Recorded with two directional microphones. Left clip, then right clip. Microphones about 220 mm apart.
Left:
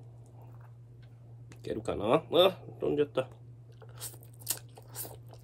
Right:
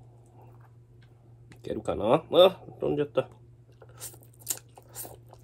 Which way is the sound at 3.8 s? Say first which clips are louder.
Right 1 dB; 10° left (ahead or behind).